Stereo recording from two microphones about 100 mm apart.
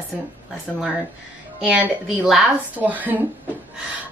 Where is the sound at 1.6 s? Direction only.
10° right (ahead or behind).